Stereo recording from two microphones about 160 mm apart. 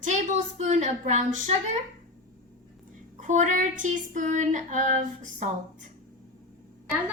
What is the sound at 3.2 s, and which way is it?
Female singing, 50° right (ahead or behind).